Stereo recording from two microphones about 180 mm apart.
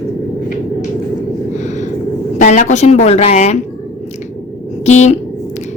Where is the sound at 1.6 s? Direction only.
40° left (ahead or behind).